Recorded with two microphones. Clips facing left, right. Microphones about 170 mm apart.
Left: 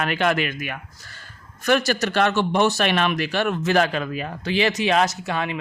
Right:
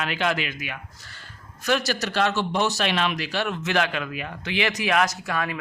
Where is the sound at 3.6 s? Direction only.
40° left (ahead or behind); by 5.5 s 25° left (ahead or behind).